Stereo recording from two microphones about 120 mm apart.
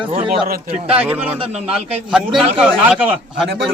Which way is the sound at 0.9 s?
10° right (ahead or behind).